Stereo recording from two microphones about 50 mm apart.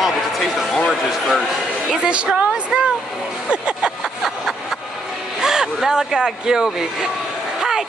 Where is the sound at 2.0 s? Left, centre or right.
Right.